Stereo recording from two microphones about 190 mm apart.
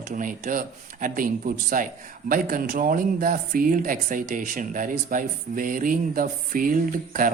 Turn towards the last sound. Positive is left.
turn(degrees=-45)  # may be behind; listen again after turning